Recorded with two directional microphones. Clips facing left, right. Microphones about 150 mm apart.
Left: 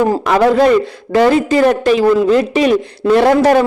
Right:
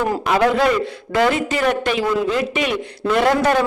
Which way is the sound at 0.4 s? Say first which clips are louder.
Left 8 dB; 35° left (ahead or behind).